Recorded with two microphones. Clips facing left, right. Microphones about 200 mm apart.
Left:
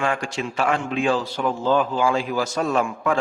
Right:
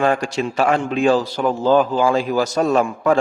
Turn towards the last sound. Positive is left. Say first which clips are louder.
# right 5 dB
turn(degrees=-40)  # may be behind; listen again after turning